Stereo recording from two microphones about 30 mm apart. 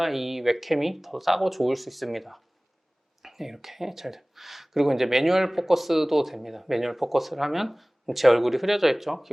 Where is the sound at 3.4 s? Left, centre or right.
Centre.